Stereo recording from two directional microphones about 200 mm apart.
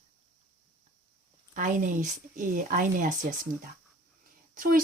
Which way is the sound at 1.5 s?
40° right (ahead or behind).